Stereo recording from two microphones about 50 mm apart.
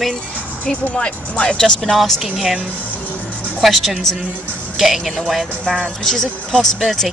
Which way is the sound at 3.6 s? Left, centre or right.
Centre.